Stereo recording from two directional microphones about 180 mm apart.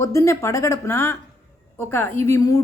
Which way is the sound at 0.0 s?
15° left (ahead or behind).